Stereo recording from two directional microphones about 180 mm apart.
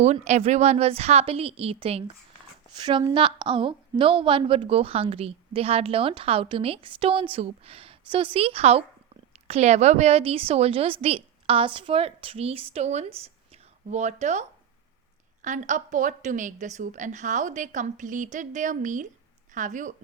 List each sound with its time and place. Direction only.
0.0 s a woman's voice: 40° right (ahead or behind)